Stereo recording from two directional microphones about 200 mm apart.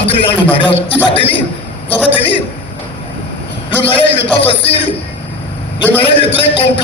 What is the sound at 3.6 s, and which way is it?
A man's voice, 25° left (ahead or behind).